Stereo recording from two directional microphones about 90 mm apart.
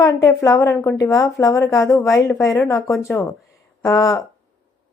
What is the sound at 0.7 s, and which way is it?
A woman's voice, 30° left (ahead or behind).